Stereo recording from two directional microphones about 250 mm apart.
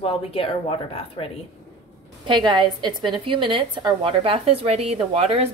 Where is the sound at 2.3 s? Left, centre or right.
Centre.